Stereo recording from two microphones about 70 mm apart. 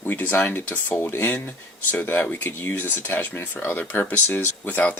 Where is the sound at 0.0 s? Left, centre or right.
Left.